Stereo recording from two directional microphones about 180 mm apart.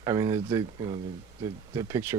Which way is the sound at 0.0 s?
20° right (ahead or behind).